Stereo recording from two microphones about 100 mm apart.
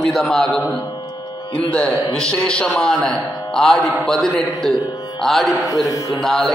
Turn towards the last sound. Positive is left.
turn(degrees=5)  # may be behind; listen again after turning